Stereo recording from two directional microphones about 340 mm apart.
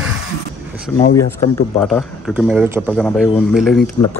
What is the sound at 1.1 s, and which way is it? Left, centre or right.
A man's voice, centre.